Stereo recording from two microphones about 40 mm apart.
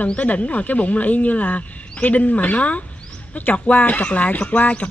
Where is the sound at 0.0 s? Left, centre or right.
Left.